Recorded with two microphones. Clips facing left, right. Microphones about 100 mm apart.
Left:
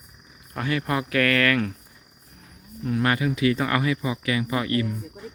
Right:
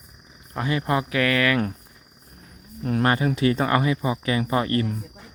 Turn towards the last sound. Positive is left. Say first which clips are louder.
# right 2 dB
turn(degrees=-40)  # may be behind; listen again after turning